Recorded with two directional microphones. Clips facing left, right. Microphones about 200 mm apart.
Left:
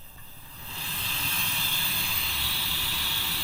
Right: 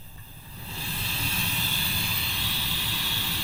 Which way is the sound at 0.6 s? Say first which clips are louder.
Right 4 dB; 5° right (ahead or behind).